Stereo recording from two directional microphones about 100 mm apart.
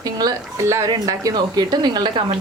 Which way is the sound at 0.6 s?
30° right (ahead or behind).